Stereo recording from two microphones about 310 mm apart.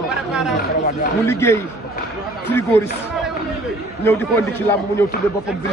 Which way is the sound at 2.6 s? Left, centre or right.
Centre.